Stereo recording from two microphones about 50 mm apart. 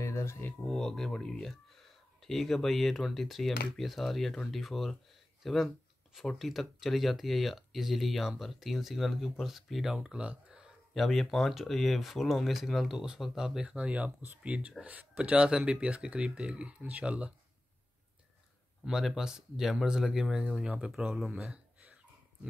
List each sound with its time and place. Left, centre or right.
0.0 s a sound: left
0.7 s music: centre
1.1 s speech: left
2.2 s speech: centre
9.9 s speech: right
11.0 s speech: centre
13.6 s speech: right
18.9 s speech: centre